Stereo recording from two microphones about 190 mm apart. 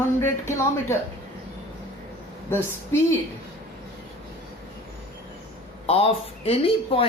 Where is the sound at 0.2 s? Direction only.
15° left (ahead or behind).